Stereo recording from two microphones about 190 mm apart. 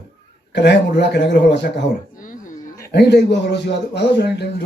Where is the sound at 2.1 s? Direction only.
45° left (ahead or behind).